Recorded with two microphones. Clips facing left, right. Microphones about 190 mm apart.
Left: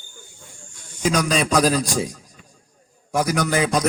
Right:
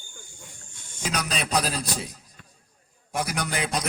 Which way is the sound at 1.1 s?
90° left.